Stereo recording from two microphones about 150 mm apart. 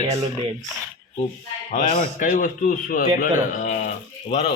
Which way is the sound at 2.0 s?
55° left (ahead or behind).